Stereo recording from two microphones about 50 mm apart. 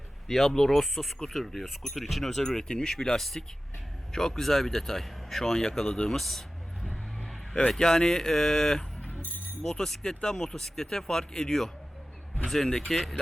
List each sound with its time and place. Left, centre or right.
0.3 s speech: centre
7.8 s speech: centre
9.0 s music: left
9.6 s speech: centre